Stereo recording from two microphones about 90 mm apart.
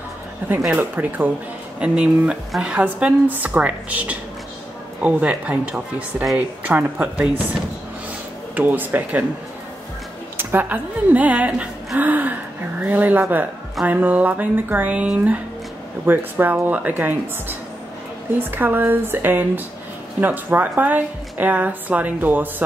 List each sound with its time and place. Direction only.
0.7 s a woman's voice: 20° right (ahead or behind)
8.5 s a woman's voice: 20° right (ahead or behind)
10.3 s a woman's voice: 20° right (ahead or behind)